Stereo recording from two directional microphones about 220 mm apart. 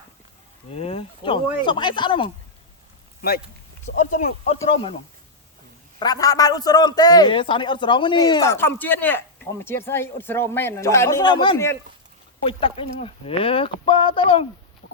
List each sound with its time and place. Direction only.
0.7 s speech: 25° left (ahead or behind)
3.2 s speech: 45° left (ahead or behind); by 4.9 s 25° left (ahead or behind)
6.0 s a man's voice: 15° left (ahead or behind)
12.5 s speech: 25° left (ahead or behind)